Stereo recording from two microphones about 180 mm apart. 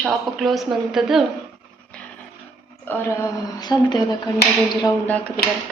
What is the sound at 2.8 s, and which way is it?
A woman's voice, 10° left (ahead or behind).